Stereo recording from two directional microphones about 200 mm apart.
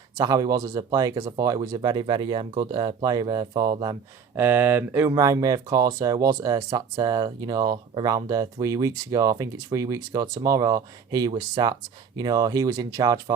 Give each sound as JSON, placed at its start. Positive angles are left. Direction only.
{"t": 0.2, "sound": "speech", "side_deg": -20}
{"t": 4.4, "sound": "speech", "side_deg": -10}